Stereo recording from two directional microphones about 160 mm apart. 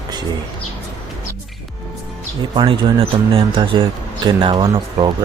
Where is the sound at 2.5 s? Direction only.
30° right (ahead or behind).